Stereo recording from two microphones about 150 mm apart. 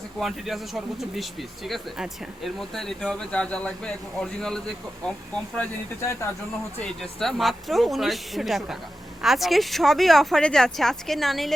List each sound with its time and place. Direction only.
0.2 s speech: centre (ahead or behind)
5.5 s speech: 20° left (ahead or behind)
6.8 s speech: centre (ahead or behind)